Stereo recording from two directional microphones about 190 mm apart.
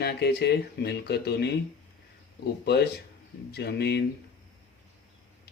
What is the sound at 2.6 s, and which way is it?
Speech, 60° left (ahead or behind).